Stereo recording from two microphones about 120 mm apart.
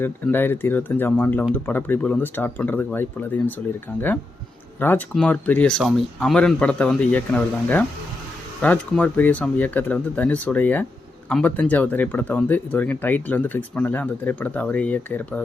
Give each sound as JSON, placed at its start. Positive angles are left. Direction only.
{"t": 0.0, "sound": "speech", "side_deg": 15}
{"t": 4.8, "sound": "speech", "side_deg": 15}